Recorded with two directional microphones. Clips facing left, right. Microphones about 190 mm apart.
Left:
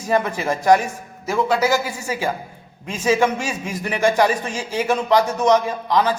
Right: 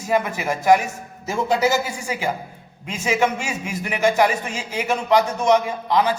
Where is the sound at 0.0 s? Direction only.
10° right (ahead or behind).